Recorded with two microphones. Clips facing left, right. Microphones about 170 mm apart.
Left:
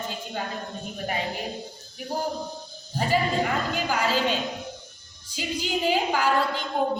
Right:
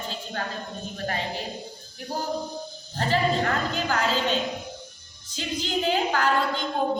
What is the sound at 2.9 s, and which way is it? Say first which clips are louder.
A woman's voice: even; 10° left (ahead or behind).